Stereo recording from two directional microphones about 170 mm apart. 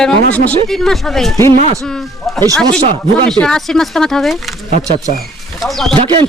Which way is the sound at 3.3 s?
5° left (ahead or behind).